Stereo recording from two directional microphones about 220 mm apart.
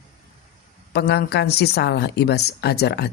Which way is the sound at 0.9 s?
50° left (ahead or behind).